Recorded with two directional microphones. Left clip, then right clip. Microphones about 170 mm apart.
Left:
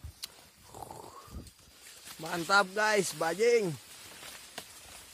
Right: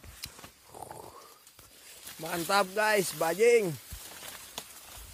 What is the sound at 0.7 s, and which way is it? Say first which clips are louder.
Dog: even; centre (ahead or behind).